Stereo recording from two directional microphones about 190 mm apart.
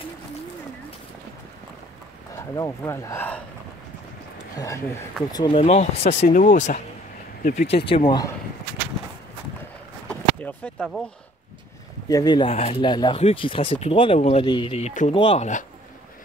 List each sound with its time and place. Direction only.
2.5 s speech: 15° left (ahead or behind)
4.6 s speech: 15° left (ahead or behind)
5.5 s speech: 35° left (ahead or behind)
10.0 s a sound: 5° left (ahead or behind)
12.1 s speech: 20° left (ahead or behind); by 15.6 s 35° left (ahead or behind)